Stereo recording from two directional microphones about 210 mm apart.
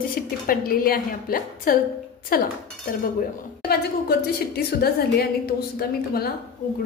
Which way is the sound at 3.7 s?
50° left (ahead or behind).